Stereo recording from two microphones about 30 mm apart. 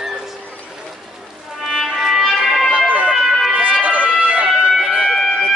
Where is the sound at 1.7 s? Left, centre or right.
Centre.